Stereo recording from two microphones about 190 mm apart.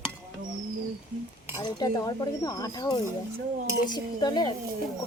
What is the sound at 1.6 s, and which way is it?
Speech, 20° left (ahead or behind).